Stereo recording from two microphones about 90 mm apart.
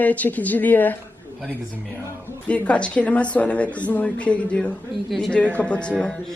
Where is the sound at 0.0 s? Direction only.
15° left (ahead or behind).